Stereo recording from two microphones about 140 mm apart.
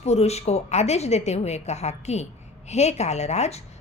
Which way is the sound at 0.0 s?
50° left (ahead or behind).